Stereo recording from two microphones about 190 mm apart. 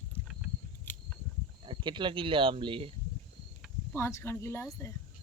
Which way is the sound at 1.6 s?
25° right (ahead or behind).